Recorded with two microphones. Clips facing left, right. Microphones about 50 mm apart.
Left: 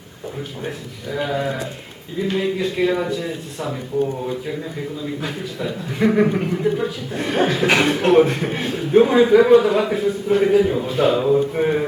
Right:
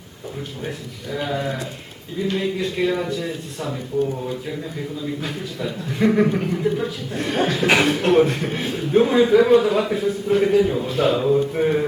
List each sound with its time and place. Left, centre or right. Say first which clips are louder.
0.6 s a man's voice: left 1 dB; centre
5.0 s a man's voice: left 1 dB; centre